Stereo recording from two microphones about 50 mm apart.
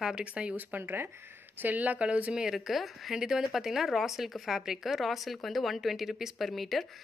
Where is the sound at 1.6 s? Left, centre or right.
Right.